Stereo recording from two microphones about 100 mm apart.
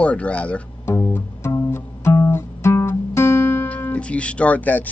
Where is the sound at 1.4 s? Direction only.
30° left (ahead or behind).